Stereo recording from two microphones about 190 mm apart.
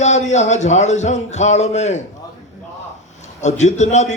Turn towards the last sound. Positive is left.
turn(degrees=35)  # may be behind; listen again after turning